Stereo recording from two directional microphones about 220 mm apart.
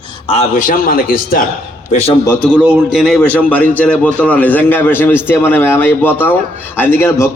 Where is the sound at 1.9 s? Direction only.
30° left (ahead or behind).